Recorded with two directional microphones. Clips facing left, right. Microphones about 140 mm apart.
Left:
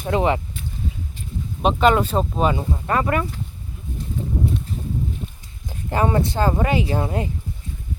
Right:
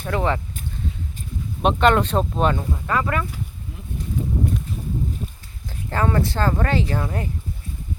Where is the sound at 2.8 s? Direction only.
30° left (ahead or behind).